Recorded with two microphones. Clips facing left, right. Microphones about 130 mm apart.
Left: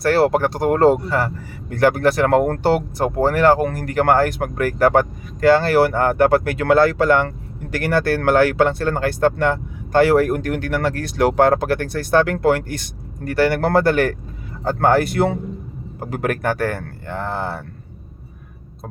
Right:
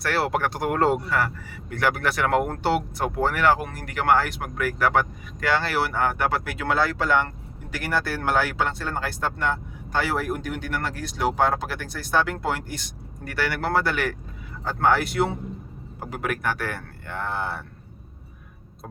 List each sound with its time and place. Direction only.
0.0 s speech: 40° left (ahead or behind); by 12.9 s 65° left (ahead or behind)
13.2 s speech: 40° left (ahead or behind)